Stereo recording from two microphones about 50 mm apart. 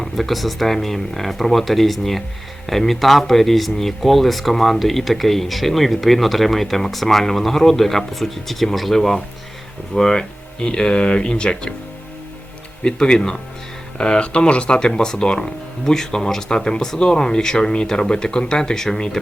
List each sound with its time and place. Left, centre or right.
0.0 s speech: centre
12.8 s speech: centre